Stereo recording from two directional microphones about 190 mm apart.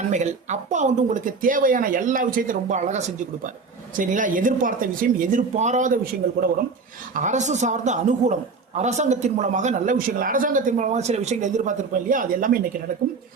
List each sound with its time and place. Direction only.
0.1 s speech: 40° right (ahead or behind)
7.2 s a man's voice: 40° right (ahead or behind)